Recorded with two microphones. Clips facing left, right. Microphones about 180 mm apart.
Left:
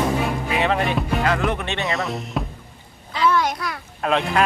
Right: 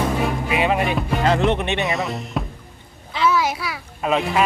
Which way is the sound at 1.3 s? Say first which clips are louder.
Right 4 dB; 25° right (ahead or behind).